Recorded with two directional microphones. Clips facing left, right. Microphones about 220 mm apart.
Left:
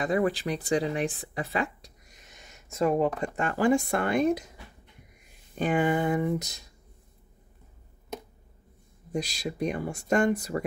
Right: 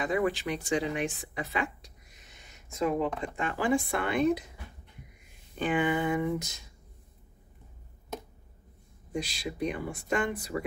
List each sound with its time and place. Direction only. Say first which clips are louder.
0.0 s speech: left 2 dB; 35° left (ahead or behind)
5.6 s speech: left 3 dB; 40° left (ahead or behind)
9.1 s speech: left 3 dB; 40° left (ahead or behind)